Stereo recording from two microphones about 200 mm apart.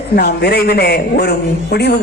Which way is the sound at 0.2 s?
55° left (ahead or behind).